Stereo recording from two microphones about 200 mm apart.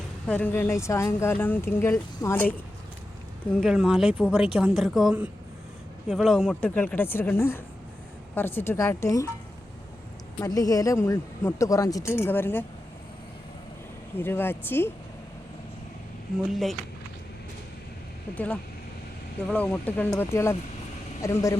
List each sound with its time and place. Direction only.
0.3 s speech: 5° left (ahead or behind)
10.4 s speech: 15° left (ahead or behind)
14.2 s speech: 10° left (ahead or behind)
16.4 s speech: centre (ahead or behind)
18.3 s speech: 5° left (ahead or behind)